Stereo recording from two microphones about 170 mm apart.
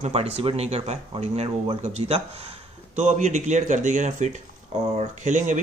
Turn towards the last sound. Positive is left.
turn(degrees=-45)  # may be behind; listen again after turning